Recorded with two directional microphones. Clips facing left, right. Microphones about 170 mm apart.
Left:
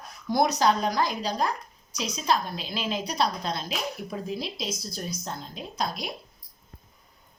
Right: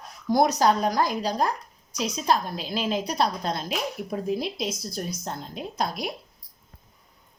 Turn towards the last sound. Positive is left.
turn(degrees=-55)  # may be behind; listen again after turning